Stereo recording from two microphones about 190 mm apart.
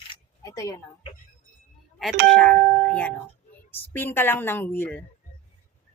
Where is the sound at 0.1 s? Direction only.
20° left (ahead or behind).